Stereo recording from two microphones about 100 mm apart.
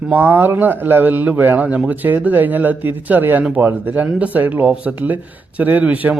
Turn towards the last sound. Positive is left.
turn(degrees=-15)  # may be behind; listen again after turning